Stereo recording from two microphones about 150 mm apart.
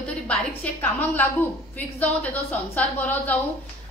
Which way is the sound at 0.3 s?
10° left (ahead or behind).